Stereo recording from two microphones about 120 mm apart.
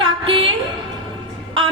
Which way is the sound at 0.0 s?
50° right (ahead or behind).